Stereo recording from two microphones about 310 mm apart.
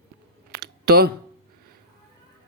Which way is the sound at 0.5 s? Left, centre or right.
Right.